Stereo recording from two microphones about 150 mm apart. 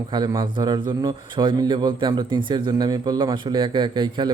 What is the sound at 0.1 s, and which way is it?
A man's voice, 30° right (ahead or behind).